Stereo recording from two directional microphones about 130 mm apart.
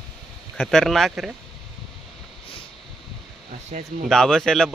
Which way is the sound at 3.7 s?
65° right (ahead or behind).